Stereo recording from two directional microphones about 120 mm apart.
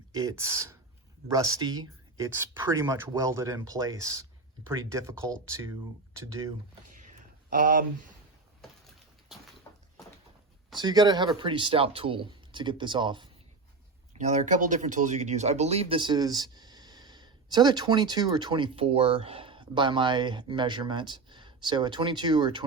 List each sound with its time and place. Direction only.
0.1 s speech: 30° right (ahead or behind)
10.8 s speech: 35° right (ahead or behind)
14.1 s speech: 75° right (ahead or behind); by 22.6 s 40° right (ahead or behind)